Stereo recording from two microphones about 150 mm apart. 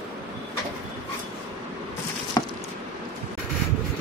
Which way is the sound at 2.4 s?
20° left (ahead or behind).